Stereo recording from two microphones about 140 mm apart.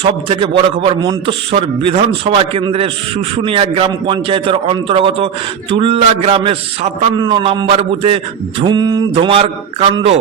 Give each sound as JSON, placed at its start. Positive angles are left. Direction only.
{"t": 0.0, "sound": "a man's voice", "side_deg": -40}
{"t": 7.2, "sound": "a man's voice", "side_deg": -35}